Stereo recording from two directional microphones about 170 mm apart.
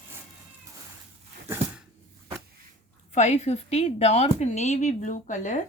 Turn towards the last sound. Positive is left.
turn(degrees=45)  # may be behind; listen again after turning